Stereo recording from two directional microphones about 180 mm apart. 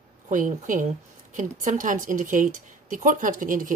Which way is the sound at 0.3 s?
45° right (ahead or behind).